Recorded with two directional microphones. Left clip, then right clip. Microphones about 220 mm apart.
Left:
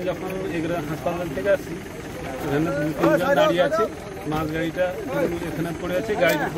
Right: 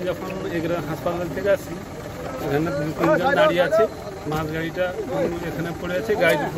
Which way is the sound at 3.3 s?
5° right (ahead or behind).